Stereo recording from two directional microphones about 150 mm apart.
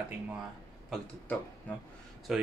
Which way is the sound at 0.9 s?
10° left (ahead or behind).